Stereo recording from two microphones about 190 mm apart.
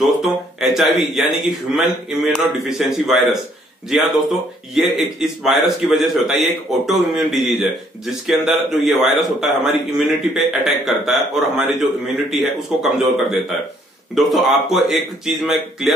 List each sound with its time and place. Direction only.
0.0 s speech: centre (ahead or behind)